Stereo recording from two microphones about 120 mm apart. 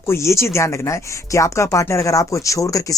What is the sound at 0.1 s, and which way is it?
Speech, 20° left (ahead or behind).